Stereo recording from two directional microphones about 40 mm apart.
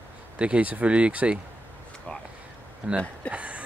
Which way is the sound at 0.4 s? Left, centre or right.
Right.